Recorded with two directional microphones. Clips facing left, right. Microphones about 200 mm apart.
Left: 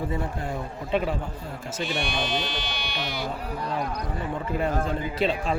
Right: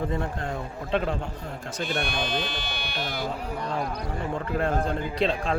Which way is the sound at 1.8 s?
55° right (ahead or behind).